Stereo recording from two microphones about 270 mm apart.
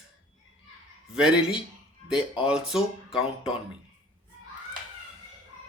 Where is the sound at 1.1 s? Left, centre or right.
Centre.